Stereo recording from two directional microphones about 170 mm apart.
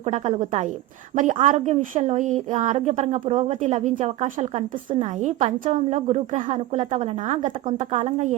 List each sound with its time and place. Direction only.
0.0 s a woman's voice: 40° right (ahead or behind)